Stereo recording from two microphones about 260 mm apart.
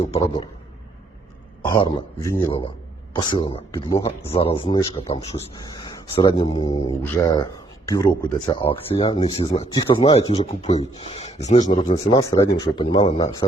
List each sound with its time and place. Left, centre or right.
0.0 s speech: left
1.6 s speech: centre